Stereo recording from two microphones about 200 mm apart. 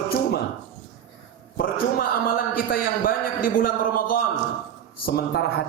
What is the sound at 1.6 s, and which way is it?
A man's voice, 50° left (ahead or behind).